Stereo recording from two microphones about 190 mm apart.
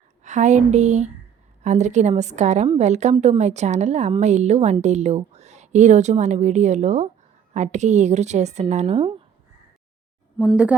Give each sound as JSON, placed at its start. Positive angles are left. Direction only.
{"t": 0.2, "sound": "a woman's voice", "side_deg": -40}
{"t": 10.3, "sound": "speech", "side_deg": 0}